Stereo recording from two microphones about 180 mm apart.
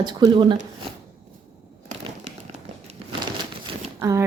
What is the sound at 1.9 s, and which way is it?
Crumpling, 40° right (ahead or behind).